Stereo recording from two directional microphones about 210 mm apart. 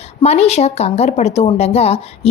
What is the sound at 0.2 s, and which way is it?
Speech, 30° left (ahead or behind).